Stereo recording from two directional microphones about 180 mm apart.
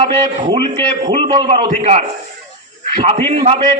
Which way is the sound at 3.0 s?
30° right (ahead or behind).